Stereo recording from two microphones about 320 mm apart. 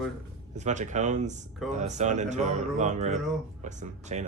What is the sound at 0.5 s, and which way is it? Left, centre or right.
Speech, right.